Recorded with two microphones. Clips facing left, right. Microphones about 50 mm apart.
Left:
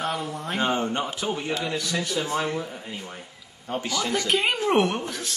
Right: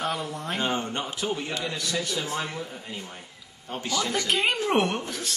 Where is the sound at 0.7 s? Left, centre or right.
Centre.